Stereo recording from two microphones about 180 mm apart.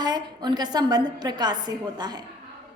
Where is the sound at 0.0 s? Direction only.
25° right (ahead or behind).